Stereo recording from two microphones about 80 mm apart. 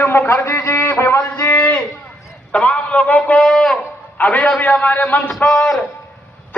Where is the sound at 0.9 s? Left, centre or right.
Left; by 3.7 s centre.